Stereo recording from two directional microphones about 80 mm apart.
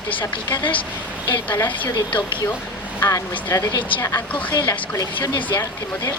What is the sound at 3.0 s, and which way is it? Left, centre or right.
Speech, left.